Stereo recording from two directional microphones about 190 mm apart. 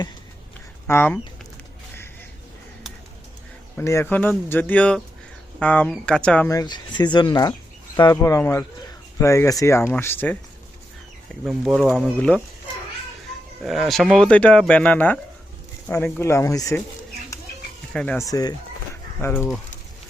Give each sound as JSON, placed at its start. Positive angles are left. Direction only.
{"t": 0.9, "sound": "speech", "side_deg": 10}
{"t": 3.8, "sound": "speech", "side_deg": 15}
{"t": 6.5, "sound": "speech", "side_deg": 20}
{"t": 11.4, "sound": "speech", "side_deg": 0}
{"t": 13.6, "sound": "speech", "side_deg": 0}
{"t": 17.9, "sound": "speech", "side_deg": 5}
{"t": 18.2, "sound": "speech", "side_deg": 20}